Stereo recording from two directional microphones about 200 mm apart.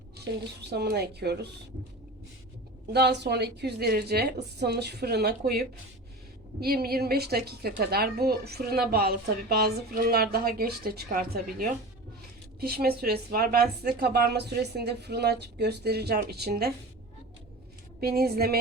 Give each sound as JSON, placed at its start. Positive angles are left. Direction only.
{"t": 0.7, "sound": "a woman's voice", "side_deg": -55}
{"t": 2.9, "sound": "a woman's voice", "side_deg": -55}
{"t": 18.0, "sound": "a woman's voice", "side_deg": -50}